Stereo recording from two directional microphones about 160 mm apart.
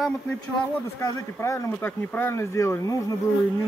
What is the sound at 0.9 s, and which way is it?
Speech, 20° left (ahead or behind).